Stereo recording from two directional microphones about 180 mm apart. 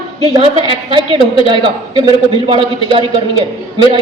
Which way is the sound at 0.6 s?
25° right (ahead or behind).